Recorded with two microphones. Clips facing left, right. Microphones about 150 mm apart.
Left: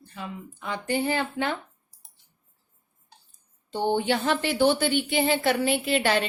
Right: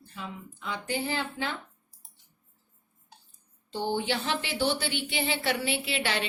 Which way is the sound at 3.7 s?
55° left (ahead or behind).